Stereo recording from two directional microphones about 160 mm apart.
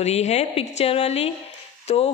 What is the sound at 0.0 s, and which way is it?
A woman's voice, 45° left (ahead or behind).